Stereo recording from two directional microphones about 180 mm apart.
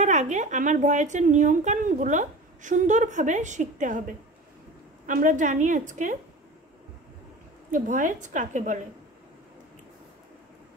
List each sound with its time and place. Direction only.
0.0 s speech: 40° right (ahead or behind)
5.0 s speech: 45° right (ahead or behind)
7.7 s speech: 45° right (ahead or behind)